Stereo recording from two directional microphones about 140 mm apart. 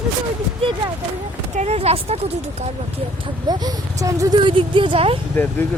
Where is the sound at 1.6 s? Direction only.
50° right (ahead or behind).